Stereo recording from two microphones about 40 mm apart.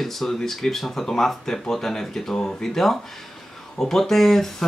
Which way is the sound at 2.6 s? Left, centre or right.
Centre.